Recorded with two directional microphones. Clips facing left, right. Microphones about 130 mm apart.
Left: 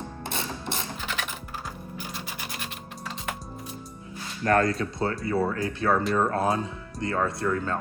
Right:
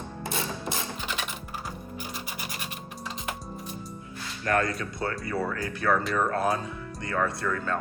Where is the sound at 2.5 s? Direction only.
5° right (ahead or behind).